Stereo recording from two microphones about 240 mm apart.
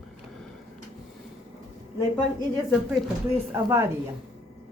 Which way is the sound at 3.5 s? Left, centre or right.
Centre.